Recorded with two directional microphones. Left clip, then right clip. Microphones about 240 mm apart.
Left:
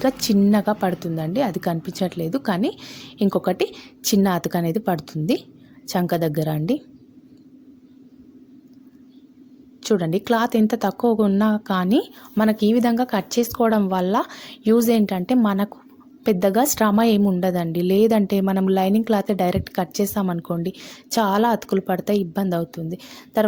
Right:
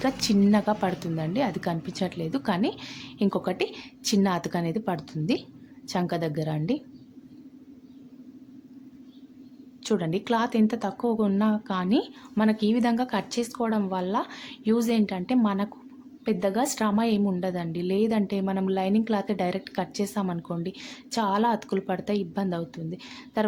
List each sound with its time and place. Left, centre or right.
0.0 s a woman's voice: left
9.8 s a woman's voice: left